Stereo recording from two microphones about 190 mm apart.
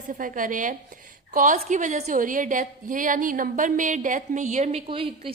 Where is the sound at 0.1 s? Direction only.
45° right (ahead or behind).